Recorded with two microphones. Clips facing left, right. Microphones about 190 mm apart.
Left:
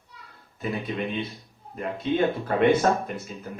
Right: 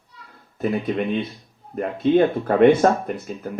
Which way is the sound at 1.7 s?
55° right (ahead or behind).